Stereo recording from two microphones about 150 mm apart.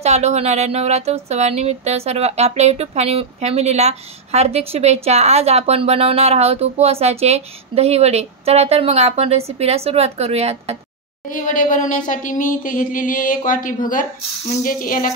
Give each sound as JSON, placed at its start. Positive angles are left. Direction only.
{"t": 0.0, "sound": "speech", "side_deg": -45}
{"t": 11.2, "sound": "speech", "side_deg": 60}